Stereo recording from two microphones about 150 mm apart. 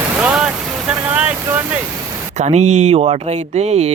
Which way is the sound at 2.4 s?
50° right (ahead or behind).